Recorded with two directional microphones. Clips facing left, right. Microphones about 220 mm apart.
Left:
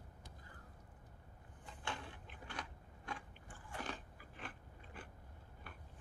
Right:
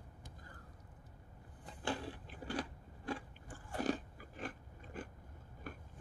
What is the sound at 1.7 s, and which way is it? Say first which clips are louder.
Biting: right 7 dB; 35° right (ahead or behind).